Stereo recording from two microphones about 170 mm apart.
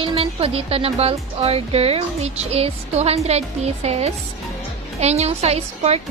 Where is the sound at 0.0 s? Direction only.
35° right (ahead or behind).